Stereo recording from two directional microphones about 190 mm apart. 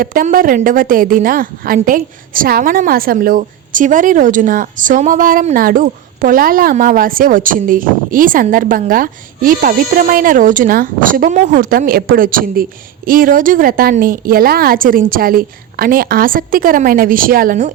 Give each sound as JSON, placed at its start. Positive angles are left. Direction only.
{"t": 0.0, "sound": "a woman's voice", "side_deg": -50}